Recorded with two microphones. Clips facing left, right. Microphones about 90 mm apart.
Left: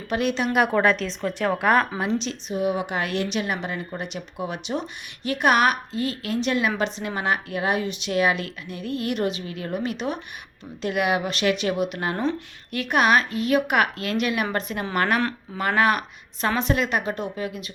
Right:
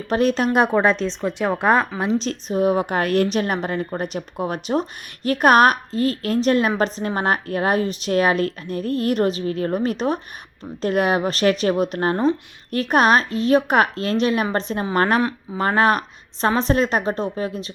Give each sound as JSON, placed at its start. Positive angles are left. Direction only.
{"t": 0.1, "sound": "a woman's voice", "side_deg": -35}
{"t": 0.7, "sound": "speech", "side_deg": -20}
{"t": 2.1, "sound": "a woman's voice", "side_deg": -40}